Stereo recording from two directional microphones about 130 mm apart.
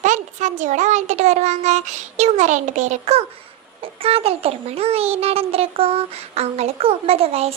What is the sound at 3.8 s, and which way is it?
A child's voice, 45° right (ahead or behind).